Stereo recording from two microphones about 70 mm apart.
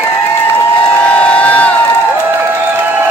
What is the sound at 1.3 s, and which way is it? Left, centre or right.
Crowd, left.